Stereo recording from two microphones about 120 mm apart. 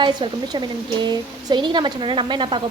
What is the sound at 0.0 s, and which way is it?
Speech, 35° right (ahead or behind).